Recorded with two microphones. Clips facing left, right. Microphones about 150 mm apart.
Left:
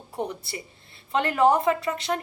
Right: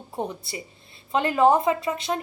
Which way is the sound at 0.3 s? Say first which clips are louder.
Even; 20° right (ahead or behind).